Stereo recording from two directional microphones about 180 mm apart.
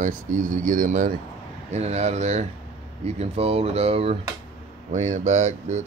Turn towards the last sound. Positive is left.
turn(degrees=-40)  # may be behind; listen again after turning